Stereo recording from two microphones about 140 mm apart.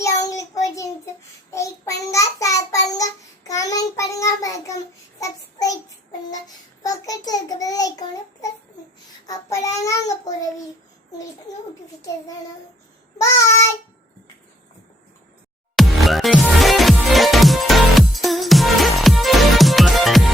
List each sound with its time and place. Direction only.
0.0 s child singing: 25° left (ahead or behind)
6.8 s child singing: 25° left (ahead or behind)
11.5 s a sound: 25° left (ahead or behind)
13.1 s child singing: 20° left (ahead or behind)
15.7 s music: centre (ahead or behind)